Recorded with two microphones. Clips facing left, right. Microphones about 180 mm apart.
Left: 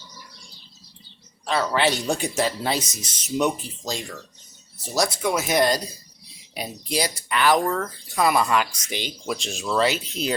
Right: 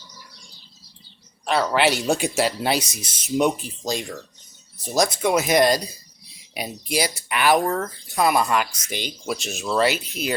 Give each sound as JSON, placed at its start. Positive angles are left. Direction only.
{"t": 1.5, "sound": "speech", "side_deg": -10}